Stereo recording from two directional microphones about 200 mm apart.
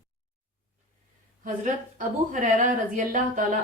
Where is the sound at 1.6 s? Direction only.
40° right (ahead or behind).